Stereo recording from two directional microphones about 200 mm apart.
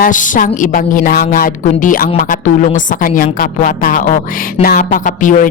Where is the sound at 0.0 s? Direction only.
40° left (ahead or behind).